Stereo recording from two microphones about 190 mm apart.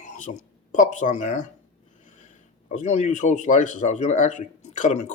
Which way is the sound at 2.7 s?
40° left (ahead or behind).